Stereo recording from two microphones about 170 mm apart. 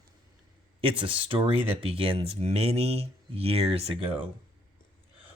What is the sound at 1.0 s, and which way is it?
Speech, 30° right (ahead or behind).